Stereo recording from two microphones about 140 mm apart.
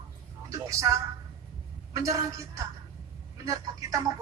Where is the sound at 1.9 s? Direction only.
25° right (ahead or behind).